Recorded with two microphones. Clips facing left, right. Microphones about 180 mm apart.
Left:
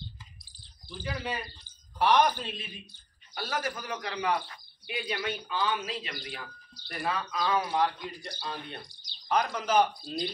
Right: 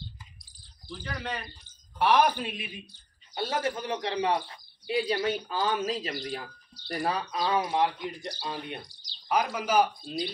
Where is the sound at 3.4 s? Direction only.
25° right (ahead or behind).